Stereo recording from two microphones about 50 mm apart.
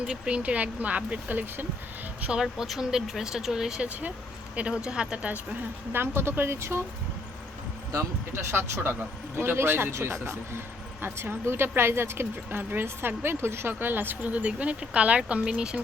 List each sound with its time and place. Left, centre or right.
0.0 s speech: right
2.4 s speech: centre; by 5.4 s right
5.9 s a woman's voice: right
8.4 s a woman's voice: right
14.2 s speech: right